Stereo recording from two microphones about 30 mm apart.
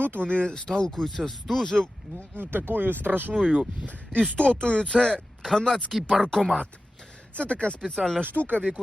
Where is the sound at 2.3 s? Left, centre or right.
Right.